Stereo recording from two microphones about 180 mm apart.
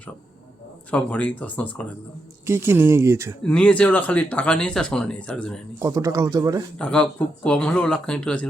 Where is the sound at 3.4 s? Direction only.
5° left (ahead or behind).